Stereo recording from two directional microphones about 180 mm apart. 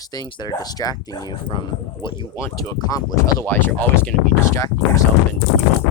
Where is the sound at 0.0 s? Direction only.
20° left (ahead or behind).